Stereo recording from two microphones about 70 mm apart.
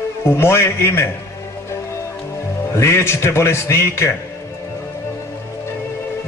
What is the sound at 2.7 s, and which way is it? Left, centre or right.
A man's voice, left.